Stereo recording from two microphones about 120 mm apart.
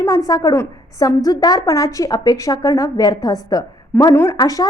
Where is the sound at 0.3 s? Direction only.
30° left (ahead or behind).